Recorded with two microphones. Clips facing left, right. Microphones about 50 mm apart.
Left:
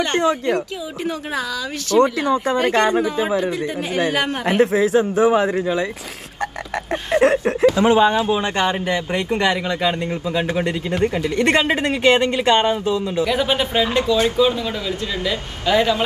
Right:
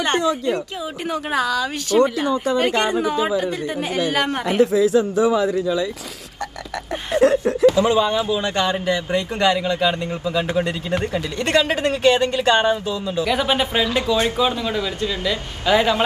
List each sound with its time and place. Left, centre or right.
2.0 s speech: left
4.3 s speech: left
7.1 s speech: left
14.1 s speech: right
15.6 s speech: centre